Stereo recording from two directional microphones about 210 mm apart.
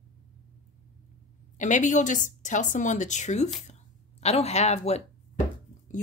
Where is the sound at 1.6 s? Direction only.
35° left (ahead or behind).